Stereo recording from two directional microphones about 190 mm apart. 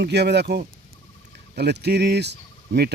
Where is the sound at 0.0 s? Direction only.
60° right (ahead or behind).